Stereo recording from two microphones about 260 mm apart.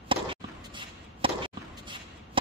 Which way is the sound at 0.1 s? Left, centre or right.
Centre.